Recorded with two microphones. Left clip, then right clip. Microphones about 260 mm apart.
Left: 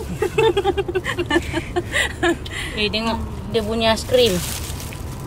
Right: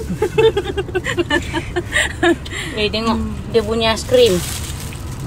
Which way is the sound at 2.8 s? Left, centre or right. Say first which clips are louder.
Right 3 dB; centre.